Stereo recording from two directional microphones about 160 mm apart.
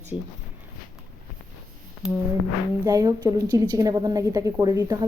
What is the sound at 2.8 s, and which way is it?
A woman's voice, 25° right (ahead or behind).